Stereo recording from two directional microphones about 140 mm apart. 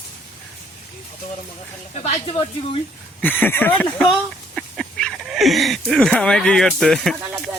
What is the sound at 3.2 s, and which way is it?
Speech, 15° left (ahead or behind).